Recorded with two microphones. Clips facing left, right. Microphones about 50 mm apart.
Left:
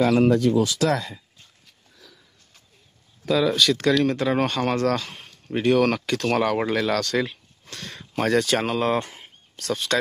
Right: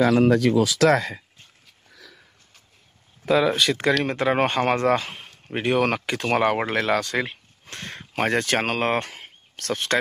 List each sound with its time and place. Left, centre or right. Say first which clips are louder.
0.3 s speech: right 1 dB; right
0.8 s speech: right 5 dB; right
3.3 s speech: even; right
7.6 s speech: right 2 dB; right